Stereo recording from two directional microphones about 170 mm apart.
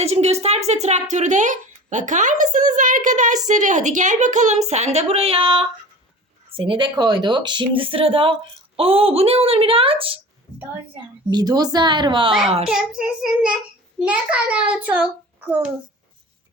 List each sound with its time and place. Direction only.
0.0 s a woman's voice: 40° right (ahead or behind)
11.3 s speech: 25° right (ahead or behind)
12.6 s child singing: 5° right (ahead or behind)
14.0 s a child's voice: 5° right (ahead or behind)